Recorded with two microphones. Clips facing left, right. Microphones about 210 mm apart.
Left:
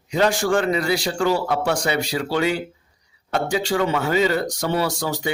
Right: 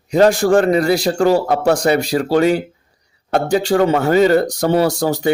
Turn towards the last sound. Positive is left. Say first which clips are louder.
# right 8 dB
turn(degrees=-50)  # may be behind; listen again after turning